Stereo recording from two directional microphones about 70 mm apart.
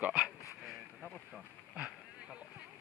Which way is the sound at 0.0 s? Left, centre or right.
Centre.